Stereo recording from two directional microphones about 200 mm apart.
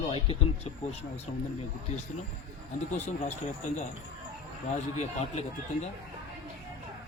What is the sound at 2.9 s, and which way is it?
Speech, 35° left (ahead or behind).